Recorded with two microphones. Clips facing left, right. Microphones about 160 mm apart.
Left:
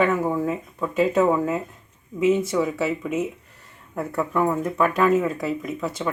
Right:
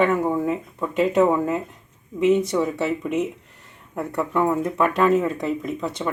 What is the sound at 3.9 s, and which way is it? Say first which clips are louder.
Speech: right 1 dB; centre (ahead or behind).